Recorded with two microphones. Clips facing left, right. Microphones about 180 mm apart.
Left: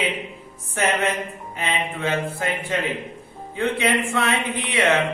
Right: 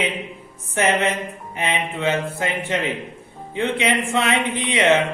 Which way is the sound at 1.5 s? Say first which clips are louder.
Right 2 dB; 20° right (ahead or behind).